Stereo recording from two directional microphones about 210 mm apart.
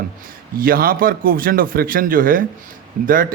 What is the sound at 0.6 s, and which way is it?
A man's voice, 45° right (ahead or behind).